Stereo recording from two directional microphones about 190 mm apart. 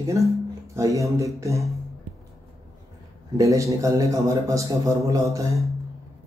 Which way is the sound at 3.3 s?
15° right (ahead or behind).